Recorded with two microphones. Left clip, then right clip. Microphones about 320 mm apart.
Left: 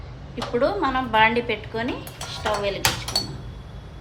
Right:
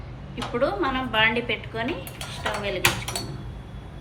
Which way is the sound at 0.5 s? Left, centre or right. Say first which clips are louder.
Left 3 dB; centre.